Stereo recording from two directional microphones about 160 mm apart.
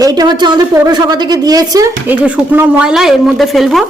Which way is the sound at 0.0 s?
25° right (ahead or behind).